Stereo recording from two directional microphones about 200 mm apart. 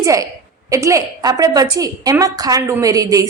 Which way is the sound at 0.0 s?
15° right (ahead or behind).